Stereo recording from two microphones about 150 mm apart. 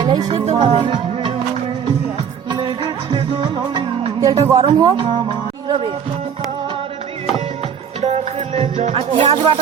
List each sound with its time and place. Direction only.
0.0 s music: 30° right (ahead or behind)
2.5 s music: 30° right (ahead or behind)
5.0 s music: 35° right (ahead or behind)
8.0 s music: 45° right (ahead or behind)